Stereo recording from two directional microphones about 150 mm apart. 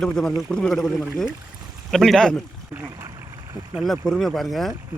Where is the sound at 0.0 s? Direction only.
5° left (ahead or behind).